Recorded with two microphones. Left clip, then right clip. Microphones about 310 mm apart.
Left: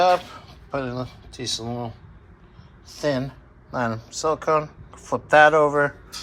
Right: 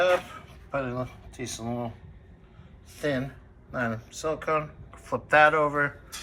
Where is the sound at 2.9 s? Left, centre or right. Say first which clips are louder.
Left 5 dB; centre.